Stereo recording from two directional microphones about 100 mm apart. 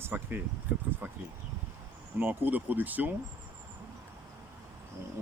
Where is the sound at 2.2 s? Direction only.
20° right (ahead or behind).